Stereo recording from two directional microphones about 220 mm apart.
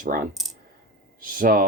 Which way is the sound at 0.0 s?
40° right (ahead or behind).